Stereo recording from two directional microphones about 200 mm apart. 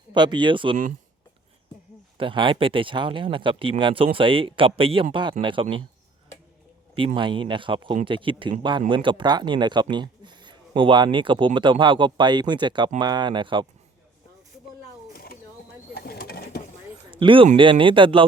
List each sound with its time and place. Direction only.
0.1 s speech: 20° right (ahead or behind)
2.1 s speech: 25° right (ahead or behind)
7.2 s speech: 25° right (ahead or behind)
15.1 s bird: 50° left (ahead or behind)
17.1 s speech: 25° right (ahead or behind)